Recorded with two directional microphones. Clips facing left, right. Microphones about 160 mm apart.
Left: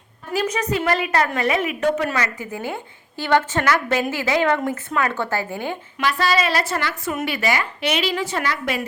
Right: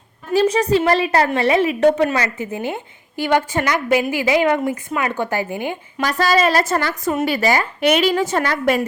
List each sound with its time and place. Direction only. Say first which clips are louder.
0.3 s a woman's voice: right 7 dB; 30° right (ahead or behind); by 5.7 s 15° right (ahead or behind)
6.0 s a woman's voice: right 4 dB; 40° right (ahead or behind)